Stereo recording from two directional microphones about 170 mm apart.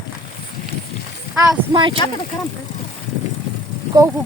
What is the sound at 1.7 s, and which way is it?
Speech, 30° right (ahead or behind).